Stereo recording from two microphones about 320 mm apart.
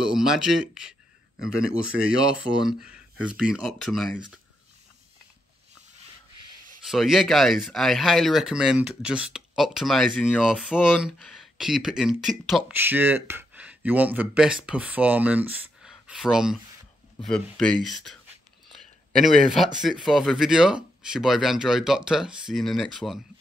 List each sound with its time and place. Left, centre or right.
0.0 s speech: centre
1.4 s speech: right
2.6 s speech: centre
6.8 s speech: centre
19.2 s speech: centre